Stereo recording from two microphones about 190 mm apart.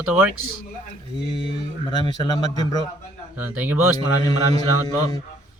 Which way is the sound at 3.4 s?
10° right (ahead or behind).